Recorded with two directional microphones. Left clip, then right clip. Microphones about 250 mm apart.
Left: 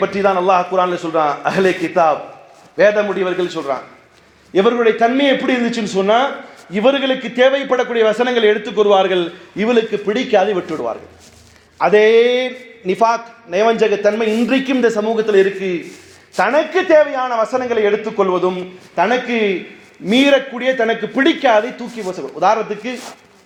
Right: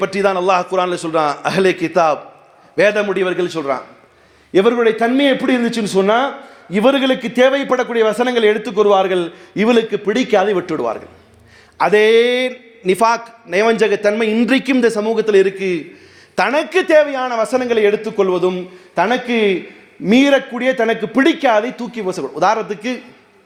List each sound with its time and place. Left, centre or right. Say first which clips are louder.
0.0 s a man's voice: left 1 dB; right